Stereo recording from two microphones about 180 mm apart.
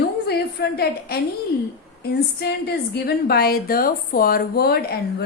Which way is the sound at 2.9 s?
60° left (ahead or behind).